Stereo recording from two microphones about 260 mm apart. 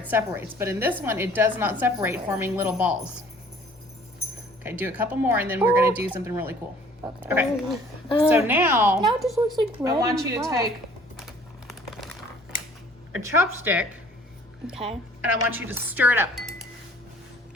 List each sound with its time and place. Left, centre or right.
0.1 s a woman's voice: centre
4.6 s a woman's voice: centre
10.0 s a woman's voice: centre
11.2 s typing: centre
13.3 s a woman's voice: centre
14.7 s a woman's voice: right
15.2 s a woman's voice: centre